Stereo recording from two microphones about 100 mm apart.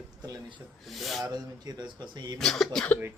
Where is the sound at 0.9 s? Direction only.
Centre (ahead or behind).